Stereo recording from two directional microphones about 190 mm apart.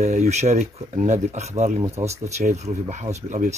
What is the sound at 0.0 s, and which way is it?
Speech, 35° right (ahead or behind).